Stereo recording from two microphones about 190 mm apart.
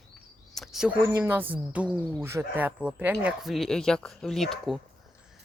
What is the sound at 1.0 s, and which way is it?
Speech, 10° right (ahead or behind).